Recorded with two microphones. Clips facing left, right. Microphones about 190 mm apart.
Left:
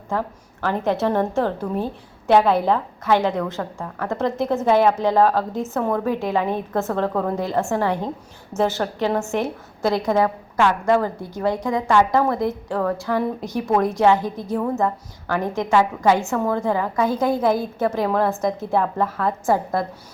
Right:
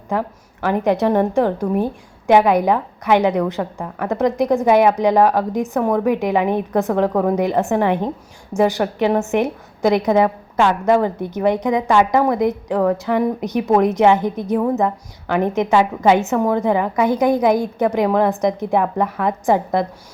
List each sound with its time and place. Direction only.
0.1 s a woman's voice: 15° right (ahead or behind)